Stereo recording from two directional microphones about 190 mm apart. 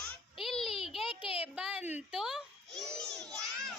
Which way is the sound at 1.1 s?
30° left (ahead or behind).